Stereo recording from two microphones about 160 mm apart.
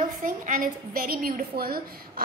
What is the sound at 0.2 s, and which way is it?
A woman's voice, 55° right (ahead or behind).